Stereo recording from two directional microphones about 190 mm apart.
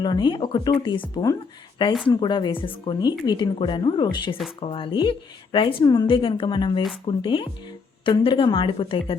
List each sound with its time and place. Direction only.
0.0 s a woman's voice: 25° left (ahead or behind)